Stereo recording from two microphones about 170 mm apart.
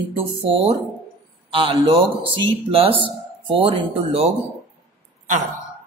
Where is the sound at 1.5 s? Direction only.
35° right (ahead or behind).